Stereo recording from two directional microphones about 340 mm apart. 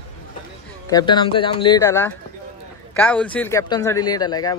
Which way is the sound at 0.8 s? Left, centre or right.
Centre.